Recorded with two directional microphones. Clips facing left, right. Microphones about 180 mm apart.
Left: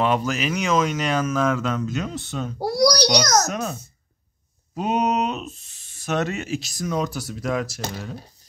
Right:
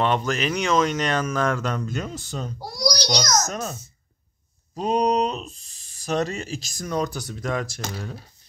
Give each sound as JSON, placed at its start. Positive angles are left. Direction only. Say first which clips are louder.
{"t": 0.0, "sound": "speech", "louder": "left 1 dB", "side_deg": 5}
{"t": 2.6, "sound": "a child's voice", "louder": "left 9 dB", "side_deg": 65}
{"t": 4.7, "sound": "speech", "louder": "right 1 dB", "side_deg": 5}